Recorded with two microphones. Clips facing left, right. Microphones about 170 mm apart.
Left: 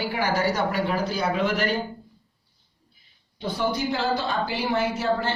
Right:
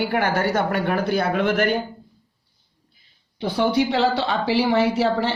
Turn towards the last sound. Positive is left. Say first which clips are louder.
# right 5 dB
turn(degrees=-70)  # may be behind; listen again after turning